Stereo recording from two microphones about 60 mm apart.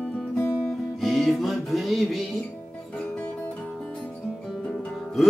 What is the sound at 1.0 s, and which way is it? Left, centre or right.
Music, centre.